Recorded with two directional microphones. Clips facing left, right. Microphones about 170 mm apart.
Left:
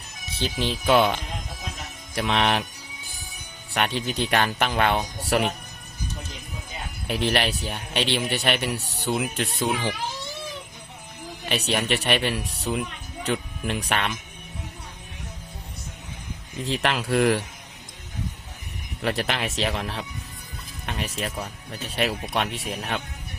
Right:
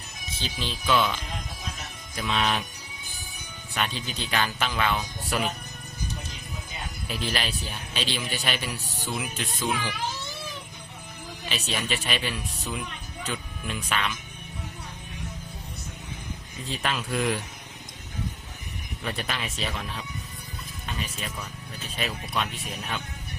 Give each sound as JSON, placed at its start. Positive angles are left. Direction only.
{"t": 0.3, "sound": "a man's voice", "side_deg": 65}
{"t": 2.1, "sound": "speech", "side_deg": 70}
{"t": 3.8, "sound": "a man's voice", "side_deg": 65}
{"t": 7.1, "sound": "a man's voice", "side_deg": 65}
{"t": 11.4, "sound": "a man's voice", "side_deg": 65}
{"t": 12.5, "sound": "speech", "side_deg": 35}
{"t": 13.2, "sound": "speech", "side_deg": 65}
{"t": 16.6, "sound": "speech", "side_deg": 75}
{"t": 19.0, "sound": "speech", "side_deg": 75}